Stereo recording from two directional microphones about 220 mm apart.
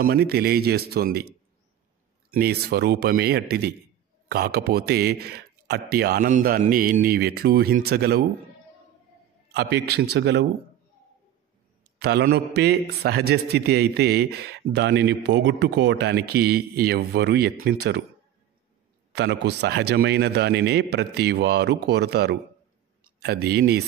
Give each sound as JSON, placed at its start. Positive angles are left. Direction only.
{"t": 0.0, "sound": "a man's voice", "side_deg": -45}
{"t": 2.3, "sound": "a man's voice", "side_deg": -45}
{"t": 9.5, "sound": "a man's voice", "side_deg": -50}
{"t": 12.0, "sound": "a man's voice", "side_deg": -50}
{"t": 19.1, "sound": "a man's voice", "side_deg": -50}